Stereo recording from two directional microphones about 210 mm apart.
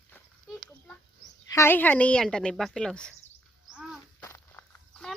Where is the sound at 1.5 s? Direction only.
15° left (ahead or behind).